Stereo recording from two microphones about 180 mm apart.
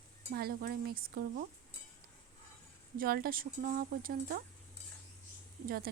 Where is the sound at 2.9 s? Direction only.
55° right (ahead or behind).